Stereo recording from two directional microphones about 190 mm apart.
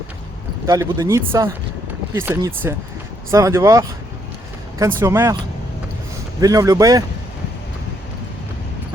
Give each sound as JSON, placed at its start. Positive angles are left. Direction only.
{"t": 0.7, "sound": "speech", "side_deg": -15}
{"t": 6.4, "sound": "speech", "side_deg": -20}